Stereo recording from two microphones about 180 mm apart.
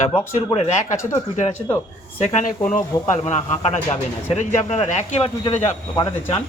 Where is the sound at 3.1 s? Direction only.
40° left (ahead or behind).